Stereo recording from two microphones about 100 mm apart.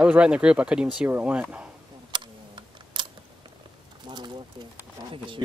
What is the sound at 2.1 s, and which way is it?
Typing, 50° right (ahead or behind).